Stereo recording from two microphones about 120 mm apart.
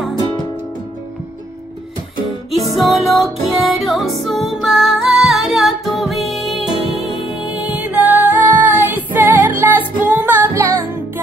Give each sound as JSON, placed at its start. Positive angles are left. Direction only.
{"t": 2.7, "sound": "music", "side_deg": 0}